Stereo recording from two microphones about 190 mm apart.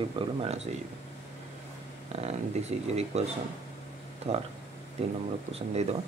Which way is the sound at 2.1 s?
35° right (ahead or behind).